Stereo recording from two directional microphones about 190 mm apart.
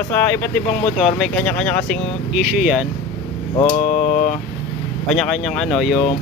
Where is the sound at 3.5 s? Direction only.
30° left (ahead or behind).